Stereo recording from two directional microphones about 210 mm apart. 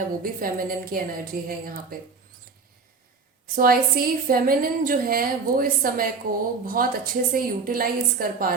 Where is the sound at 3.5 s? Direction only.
45° right (ahead or behind).